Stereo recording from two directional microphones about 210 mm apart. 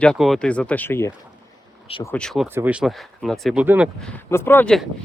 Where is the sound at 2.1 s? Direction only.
5° left (ahead or behind).